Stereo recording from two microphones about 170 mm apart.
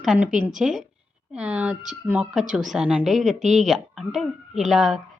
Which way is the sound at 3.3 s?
45° right (ahead or behind).